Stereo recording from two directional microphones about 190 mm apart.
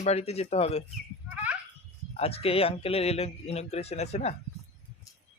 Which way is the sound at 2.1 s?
30° left (ahead or behind).